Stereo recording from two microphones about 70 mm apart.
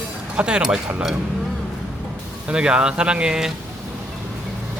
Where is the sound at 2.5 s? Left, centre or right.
Centre.